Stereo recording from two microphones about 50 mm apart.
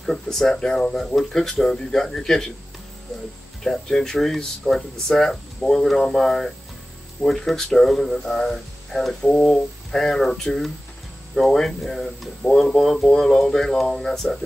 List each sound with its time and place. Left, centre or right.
0.0 s speech: centre
3.6 s speech: centre
9.2 s speech: centre